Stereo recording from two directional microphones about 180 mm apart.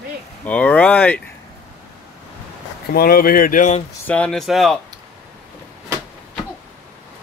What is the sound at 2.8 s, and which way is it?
Speech, 55° left (ahead or behind).